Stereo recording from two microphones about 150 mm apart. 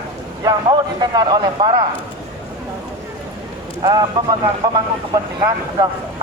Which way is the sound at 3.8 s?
30° right (ahead or behind).